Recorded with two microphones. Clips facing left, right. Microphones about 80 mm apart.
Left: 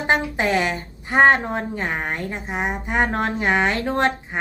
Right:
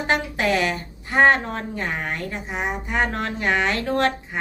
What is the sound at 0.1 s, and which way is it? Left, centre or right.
A woman's voice, left.